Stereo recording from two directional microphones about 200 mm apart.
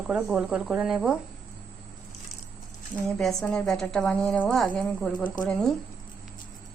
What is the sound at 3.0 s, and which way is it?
A woman's voice, 5° left (ahead or behind).